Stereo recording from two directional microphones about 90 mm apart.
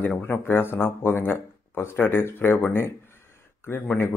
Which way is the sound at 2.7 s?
25° left (ahead or behind).